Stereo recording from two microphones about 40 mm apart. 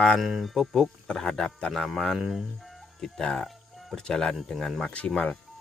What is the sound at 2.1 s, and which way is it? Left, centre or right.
Speech, centre.